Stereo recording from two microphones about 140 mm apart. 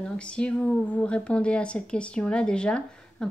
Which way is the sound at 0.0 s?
5° left (ahead or behind).